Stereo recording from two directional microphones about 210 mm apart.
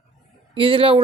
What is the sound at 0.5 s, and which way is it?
Speech, 25° right (ahead or behind).